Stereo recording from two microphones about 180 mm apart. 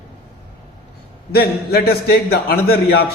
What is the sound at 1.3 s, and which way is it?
A man's voice, 60° left (ahead or behind).